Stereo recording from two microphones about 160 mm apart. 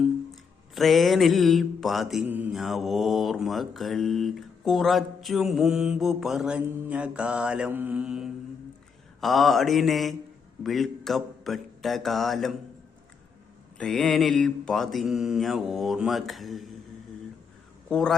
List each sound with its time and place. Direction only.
0.7 s mantra: centre (ahead or behind)
13.7 s mantra: 5° left (ahead or behind)
17.8 s speech: 5° left (ahead or behind)